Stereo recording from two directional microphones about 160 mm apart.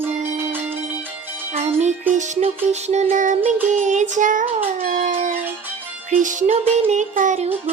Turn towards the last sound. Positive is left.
turn(degrees=-50)  # may be behind; listen again after turning